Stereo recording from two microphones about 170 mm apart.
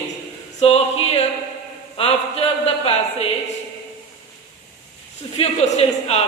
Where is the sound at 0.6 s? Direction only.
35° left (ahead or behind).